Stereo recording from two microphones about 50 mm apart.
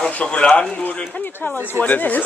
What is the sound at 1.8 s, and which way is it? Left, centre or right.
Speech, left.